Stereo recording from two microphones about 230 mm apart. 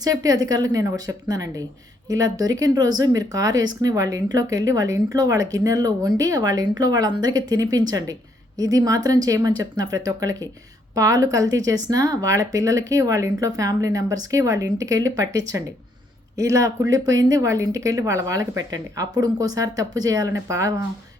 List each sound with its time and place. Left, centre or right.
0.0 s speech: centre